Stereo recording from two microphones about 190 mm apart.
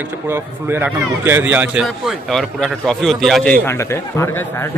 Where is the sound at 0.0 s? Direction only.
15° right (ahead or behind).